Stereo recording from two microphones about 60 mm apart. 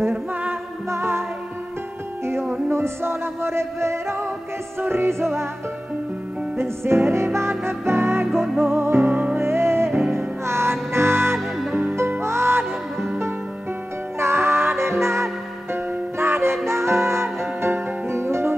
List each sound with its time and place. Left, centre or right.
0.1 s music: right
0.8 s music: right
2.2 s music: right
6.5 s music: right
9.1 s music: right
9.4 s music: right
14.2 s music: right